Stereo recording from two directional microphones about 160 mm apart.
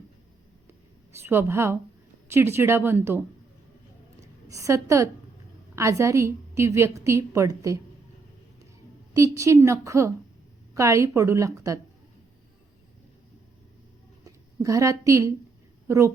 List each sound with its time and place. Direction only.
1.1 s speech: 15° right (ahead or behind)
4.4 s a woman's voice: 20° right (ahead or behind)
9.1 s a woman's voice: 20° right (ahead or behind)
14.3 s a woman's voice: 20° right (ahead or behind)